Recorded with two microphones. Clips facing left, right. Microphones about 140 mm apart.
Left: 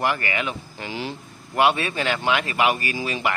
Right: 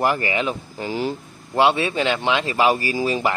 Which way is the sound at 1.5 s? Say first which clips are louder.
Right 2 dB; 20° right (ahead or behind).